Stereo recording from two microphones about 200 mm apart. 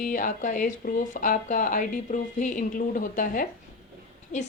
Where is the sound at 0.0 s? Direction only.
40° left (ahead or behind).